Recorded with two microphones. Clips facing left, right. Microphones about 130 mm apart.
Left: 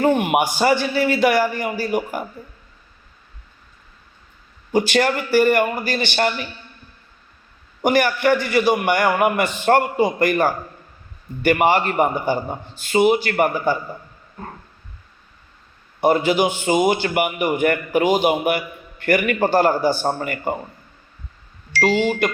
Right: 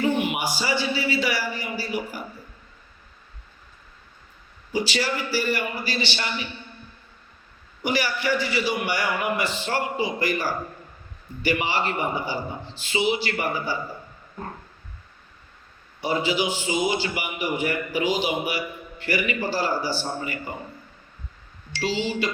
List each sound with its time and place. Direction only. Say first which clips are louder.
0.0 s a man's voice: left 6 dB; 55° left (ahead or behind)
4.7 s a man's voice: left 8 dB; 55° left (ahead or behind)
7.8 s a man's voice: left 8 dB; 50° left (ahead or behind)
16.0 s a man's voice: left 8 dB; 55° left (ahead or behind)
21.8 s a man's voice: left 8 dB; 55° left (ahead or behind)